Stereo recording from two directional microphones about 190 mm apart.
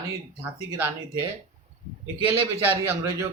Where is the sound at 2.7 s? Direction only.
10° right (ahead or behind).